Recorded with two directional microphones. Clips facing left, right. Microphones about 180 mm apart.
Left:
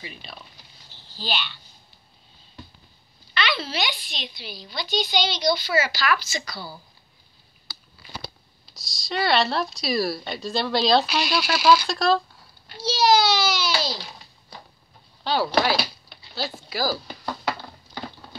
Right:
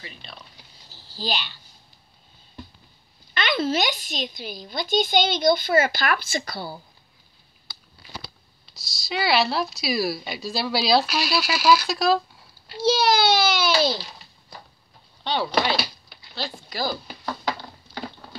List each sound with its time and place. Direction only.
0.2 s speech: 5° left (ahead or behind)
0.8 s a sound: 40° right (ahead or behind)
3.3 s a woman's voice: 50° right (ahead or behind)
8.6 s speech: centre (ahead or behind)
12.8 s a child's voice: 55° right (ahead or behind)
15.2 s speech: 5° left (ahead or behind)